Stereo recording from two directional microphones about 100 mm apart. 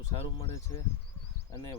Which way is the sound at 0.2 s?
70° left (ahead or behind).